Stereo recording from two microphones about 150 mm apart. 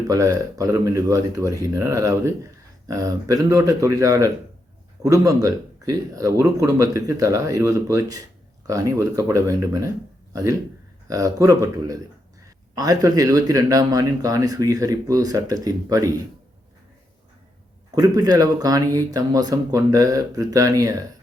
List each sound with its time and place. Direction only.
0.1 s a man's voice: 25° right (ahead or behind)
17.9 s speech: 25° right (ahead or behind)